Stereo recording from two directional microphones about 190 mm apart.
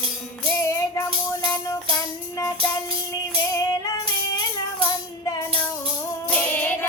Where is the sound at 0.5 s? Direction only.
15° left (ahead or behind).